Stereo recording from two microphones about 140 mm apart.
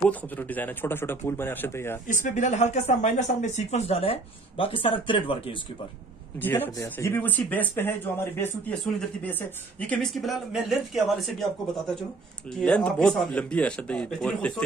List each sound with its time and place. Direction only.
0.1 s speech: 10° left (ahead or behind)
2.0 s speech: 60° left (ahead or behind); by 5.6 s 35° left (ahead or behind)
6.4 s speech: 15° left (ahead or behind)
12.5 s speech: 5° left (ahead or behind)